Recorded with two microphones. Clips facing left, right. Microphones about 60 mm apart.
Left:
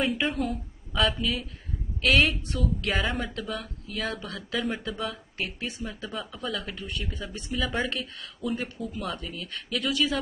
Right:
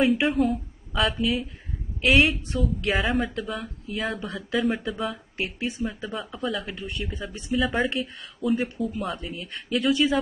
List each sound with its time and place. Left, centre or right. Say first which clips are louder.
0.0 s a woman's voice: right 6 dB; centre
2.9 s speech: right 6 dB; centre
6.9 s speech: right 2 dB; centre
7.6 s speech: right 3 dB; centre
9.2 s speech: right 2 dB; centre